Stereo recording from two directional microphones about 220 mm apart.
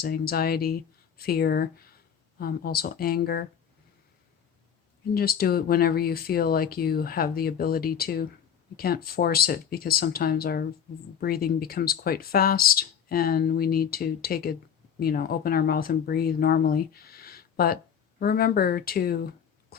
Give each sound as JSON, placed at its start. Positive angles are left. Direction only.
{"t": 0.0, "sound": "speech", "side_deg": 45}
{"t": 5.1, "sound": "speech", "side_deg": 45}